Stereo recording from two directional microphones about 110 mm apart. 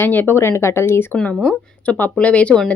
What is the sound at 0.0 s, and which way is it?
A woman's voice, 20° left (ahead or behind).